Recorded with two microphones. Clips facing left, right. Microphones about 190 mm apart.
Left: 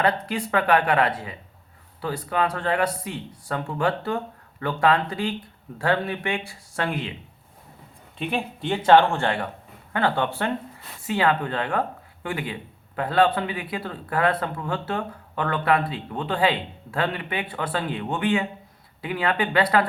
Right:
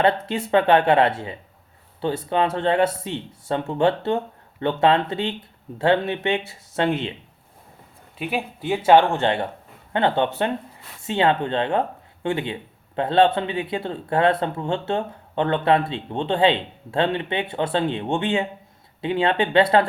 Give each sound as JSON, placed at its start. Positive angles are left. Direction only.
{"t": 0.0, "sound": "speech", "side_deg": -25}
{"t": 8.2, "sound": "speech", "side_deg": -5}